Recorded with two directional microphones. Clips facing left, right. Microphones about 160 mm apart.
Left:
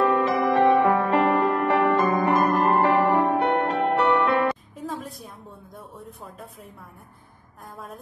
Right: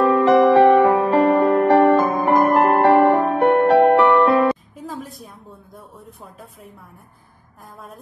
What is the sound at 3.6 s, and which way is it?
Music, 75° right (ahead or behind).